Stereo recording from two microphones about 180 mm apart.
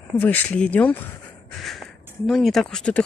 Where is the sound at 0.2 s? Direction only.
10° left (ahead or behind).